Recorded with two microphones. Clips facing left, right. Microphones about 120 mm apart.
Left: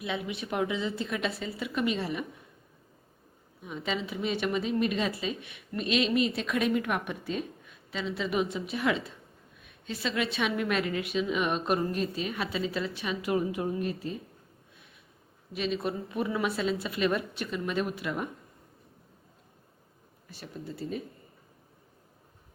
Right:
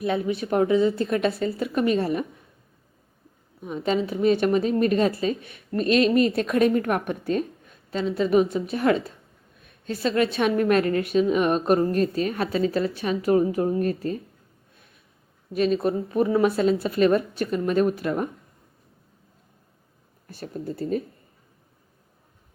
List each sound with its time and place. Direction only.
0.0 s a woman's voice: 45° right (ahead or behind)
3.6 s a woman's voice: 40° right (ahead or behind)
15.5 s a woman's voice: 45° right (ahead or behind)
20.2 s a woman's voice: 50° right (ahead or behind)